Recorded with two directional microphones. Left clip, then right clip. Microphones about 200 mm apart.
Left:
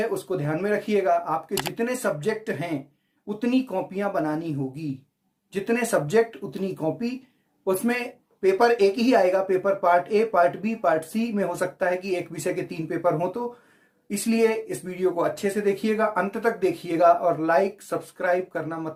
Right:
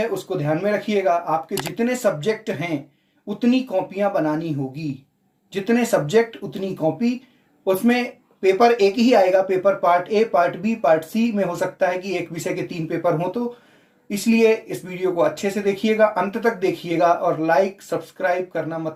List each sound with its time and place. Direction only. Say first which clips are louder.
0.0 s speech: right 3 dB; 15° left (ahead or behind)
8.4 s speech: right 4 dB; 15° left (ahead or behind)